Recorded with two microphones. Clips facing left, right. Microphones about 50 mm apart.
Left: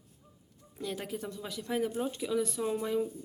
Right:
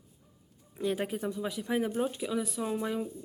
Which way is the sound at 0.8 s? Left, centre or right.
Right.